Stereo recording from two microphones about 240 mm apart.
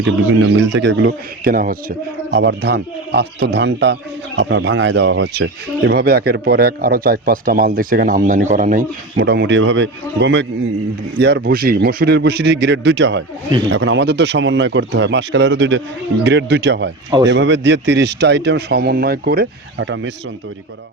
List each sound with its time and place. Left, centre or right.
0.0 s speech: right